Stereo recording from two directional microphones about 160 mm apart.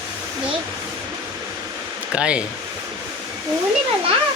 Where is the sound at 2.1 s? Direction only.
5° right (ahead or behind).